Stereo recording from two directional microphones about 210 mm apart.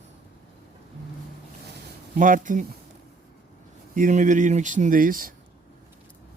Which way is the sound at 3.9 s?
35° right (ahead or behind).